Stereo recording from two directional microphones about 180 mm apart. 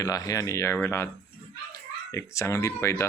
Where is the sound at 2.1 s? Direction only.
15° left (ahead or behind).